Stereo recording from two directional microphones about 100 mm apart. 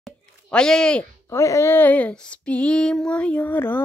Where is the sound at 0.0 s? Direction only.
5° left (ahead or behind).